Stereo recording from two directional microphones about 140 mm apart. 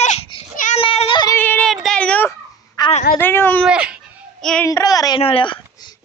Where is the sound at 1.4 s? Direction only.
15° left (ahead or behind).